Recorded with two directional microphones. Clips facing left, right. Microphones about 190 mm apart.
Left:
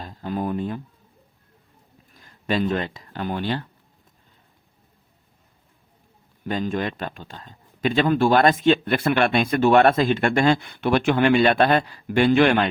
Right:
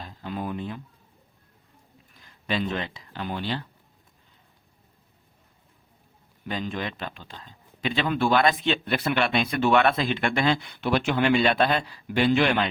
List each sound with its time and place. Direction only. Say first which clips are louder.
0.0 s a sound: left 5 dB; 45° left (ahead or behind)
2.2 s speech: left 5 dB; 45° left (ahead or behind)
6.4 s a man's voice: left 6 dB; 45° left (ahead or behind)